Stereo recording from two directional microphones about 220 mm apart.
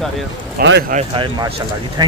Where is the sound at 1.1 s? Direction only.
20° right (ahead or behind).